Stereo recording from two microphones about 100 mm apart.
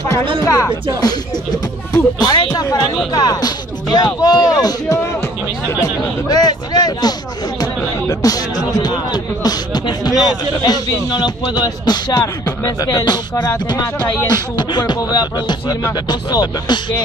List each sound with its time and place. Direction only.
0.4 s speech: 35° left (ahead or behind)
2.1 s speech: 40° left (ahead or behind)
9.1 s beatboxing: 40° left (ahead or behind)
10.2 s speech: 40° left (ahead or behind)